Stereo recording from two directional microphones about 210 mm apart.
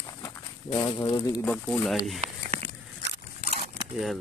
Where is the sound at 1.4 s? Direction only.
5° left (ahead or behind).